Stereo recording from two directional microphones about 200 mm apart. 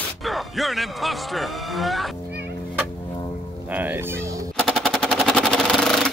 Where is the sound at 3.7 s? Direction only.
10° right (ahead or behind).